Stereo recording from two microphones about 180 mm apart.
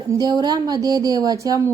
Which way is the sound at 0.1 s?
20° right (ahead or behind).